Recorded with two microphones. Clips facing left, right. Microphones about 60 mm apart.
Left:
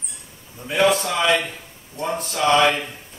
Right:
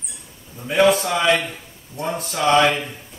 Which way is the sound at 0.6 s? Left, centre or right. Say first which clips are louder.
Right 2 dB; centre.